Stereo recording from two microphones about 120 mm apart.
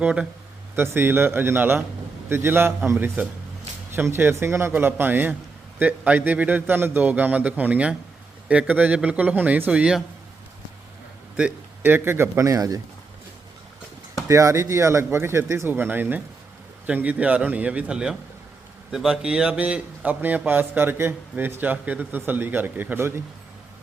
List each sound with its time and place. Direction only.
0.0 s a man's voice: 10° right (ahead or behind)
11.3 s speech: 15° right (ahead or behind); by 12.8 s 30° right (ahead or behind)
14.3 s a man's voice: 25° right (ahead or behind)